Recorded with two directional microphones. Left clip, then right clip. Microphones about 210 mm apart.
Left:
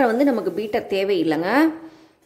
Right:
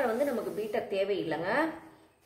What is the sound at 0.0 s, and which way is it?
Speech, 50° left (ahead or behind).